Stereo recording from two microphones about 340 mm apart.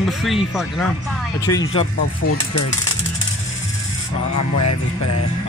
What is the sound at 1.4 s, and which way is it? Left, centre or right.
Speech, centre.